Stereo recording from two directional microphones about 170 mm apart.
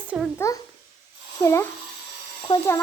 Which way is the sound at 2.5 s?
35° left (ahead or behind).